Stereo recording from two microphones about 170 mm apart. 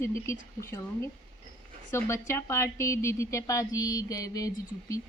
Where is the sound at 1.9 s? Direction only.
15° left (ahead or behind).